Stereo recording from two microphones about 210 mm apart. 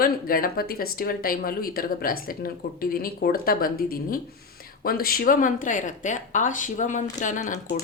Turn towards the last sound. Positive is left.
turn(degrees=35)  # may be behind; listen again after turning